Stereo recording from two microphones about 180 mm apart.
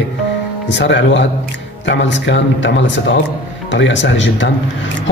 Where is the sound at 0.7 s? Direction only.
80° left.